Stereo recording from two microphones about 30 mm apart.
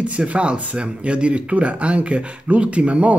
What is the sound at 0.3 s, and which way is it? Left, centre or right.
Speech, right.